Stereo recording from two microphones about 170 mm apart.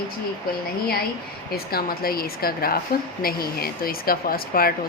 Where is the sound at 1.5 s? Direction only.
60° left (ahead or behind).